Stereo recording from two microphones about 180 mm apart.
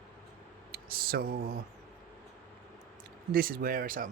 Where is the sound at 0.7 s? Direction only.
55° right (ahead or behind).